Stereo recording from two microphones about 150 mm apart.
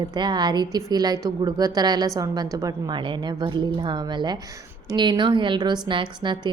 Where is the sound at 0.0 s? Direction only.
30° right (ahead or behind).